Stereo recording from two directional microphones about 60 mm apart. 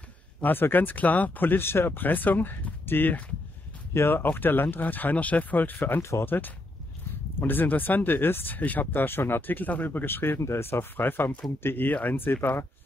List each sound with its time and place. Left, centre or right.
0.4 s speech: left
3.9 s speech: left